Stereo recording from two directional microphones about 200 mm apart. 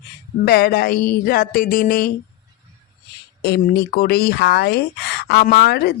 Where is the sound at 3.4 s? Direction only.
50° left (ahead or behind).